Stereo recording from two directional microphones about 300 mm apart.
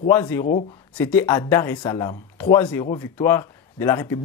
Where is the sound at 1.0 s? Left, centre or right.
Centre.